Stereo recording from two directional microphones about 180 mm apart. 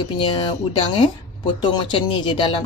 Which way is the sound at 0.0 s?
30° left (ahead or behind).